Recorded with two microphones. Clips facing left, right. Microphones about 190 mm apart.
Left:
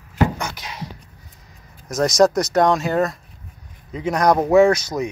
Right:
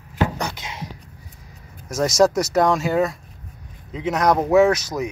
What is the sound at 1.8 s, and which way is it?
Speech, 5° right (ahead or behind).